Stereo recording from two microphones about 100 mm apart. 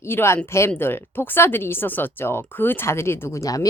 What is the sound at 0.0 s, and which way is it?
A woman's voice, 25° left (ahead or behind).